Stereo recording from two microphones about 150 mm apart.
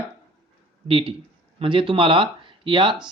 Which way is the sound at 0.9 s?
35° right (ahead or behind).